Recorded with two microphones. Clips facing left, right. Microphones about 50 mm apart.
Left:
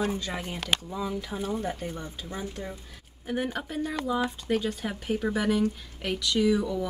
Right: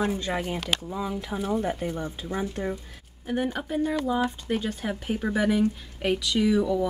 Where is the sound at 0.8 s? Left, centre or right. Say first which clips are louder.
Right 2 dB; centre.